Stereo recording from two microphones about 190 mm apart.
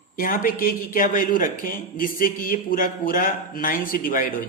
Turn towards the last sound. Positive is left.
turn(degrees=45)  # may be behind; listen again after turning